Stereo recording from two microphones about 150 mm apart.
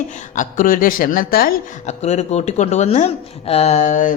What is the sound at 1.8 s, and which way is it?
Speech, 50° left (ahead or behind).